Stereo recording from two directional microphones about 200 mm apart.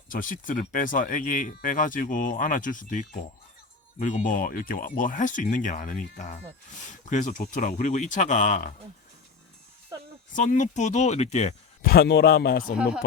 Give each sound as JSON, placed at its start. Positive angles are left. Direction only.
{"t": 0.1, "sound": "speech", "side_deg": 40}
{"t": 10.3, "sound": "speech", "side_deg": 40}
{"t": 12.7, "sound": "speech", "side_deg": -5}